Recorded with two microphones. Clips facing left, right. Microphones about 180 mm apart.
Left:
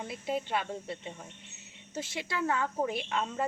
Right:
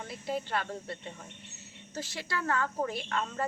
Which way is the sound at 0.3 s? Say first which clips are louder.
Left 1 dB; 20° left (ahead or behind).